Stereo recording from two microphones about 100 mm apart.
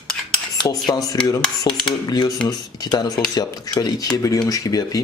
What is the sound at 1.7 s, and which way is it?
Speech, 45° left (ahead or behind).